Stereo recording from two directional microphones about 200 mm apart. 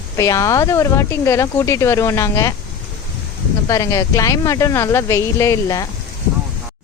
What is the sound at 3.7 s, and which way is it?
Speech, 15° left (ahead or behind).